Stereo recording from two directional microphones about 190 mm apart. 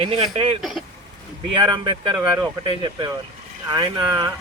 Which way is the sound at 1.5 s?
25° right (ahead or behind).